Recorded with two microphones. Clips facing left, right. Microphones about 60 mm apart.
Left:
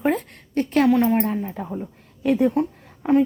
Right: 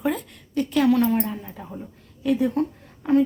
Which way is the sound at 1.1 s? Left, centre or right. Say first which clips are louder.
Left 4 dB; left.